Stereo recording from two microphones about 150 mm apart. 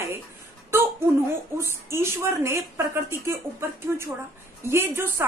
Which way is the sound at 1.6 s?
15° right (ahead or behind).